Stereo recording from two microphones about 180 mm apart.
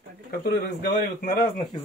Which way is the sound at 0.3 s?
60° left (ahead or behind).